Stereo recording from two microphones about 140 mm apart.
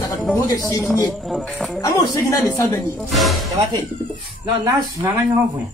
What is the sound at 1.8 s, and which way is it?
Speech, 25° left (ahead or behind).